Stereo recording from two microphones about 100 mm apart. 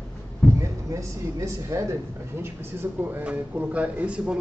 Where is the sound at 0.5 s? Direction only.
30° right (ahead or behind).